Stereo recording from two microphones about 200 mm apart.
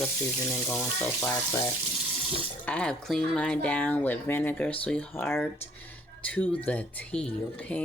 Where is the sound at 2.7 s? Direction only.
5° left (ahead or behind).